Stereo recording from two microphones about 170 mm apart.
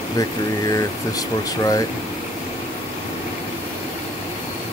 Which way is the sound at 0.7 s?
20° left (ahead or behind).